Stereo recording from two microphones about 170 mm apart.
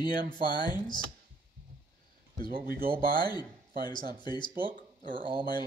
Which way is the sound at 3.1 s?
25° left (ahead or behind).